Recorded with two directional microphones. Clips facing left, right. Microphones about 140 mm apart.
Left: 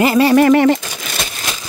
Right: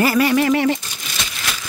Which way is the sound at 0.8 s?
75° left (ahead or behind).